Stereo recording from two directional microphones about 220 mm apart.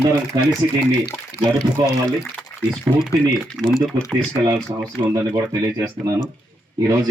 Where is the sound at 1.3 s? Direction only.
45° left (ahead or behind).